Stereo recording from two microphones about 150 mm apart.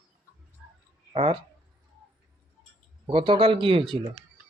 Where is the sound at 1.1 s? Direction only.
40° right (ahead or behind).